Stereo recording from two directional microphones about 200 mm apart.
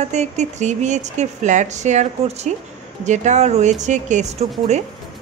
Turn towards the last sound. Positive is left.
turn(degrees=-35)  # may be behind; listen again after turning